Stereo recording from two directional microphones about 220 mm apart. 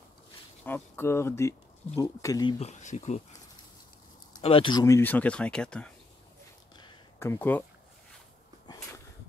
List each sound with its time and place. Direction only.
0.7 s speech: 10° left (ahead or behind)
2.6 s speech: 30° left (ahead or behind)
4.3 s speech: 25° left (ahead or behind); by 5.9 s 5° left (ahead or behind)
6.8 s a sound: 10° left (ahead or behind)